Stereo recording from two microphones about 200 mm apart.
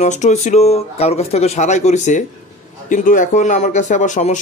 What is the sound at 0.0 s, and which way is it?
Speech, 35° left (ahead or behind).